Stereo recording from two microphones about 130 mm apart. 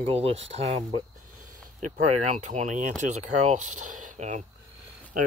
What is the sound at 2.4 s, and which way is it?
Speech, 65° right (ahead or behind).